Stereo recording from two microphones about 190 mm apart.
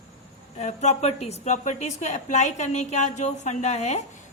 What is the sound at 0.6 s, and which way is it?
A woman's voice, 35° left (ahead or behind).